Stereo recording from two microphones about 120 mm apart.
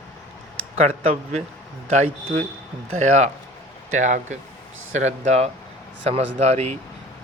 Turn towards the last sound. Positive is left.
turn(degrees=-60)  # may be behind; listen again after turning